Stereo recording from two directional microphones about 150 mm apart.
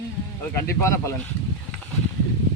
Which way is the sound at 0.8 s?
20° left (ahead or behind).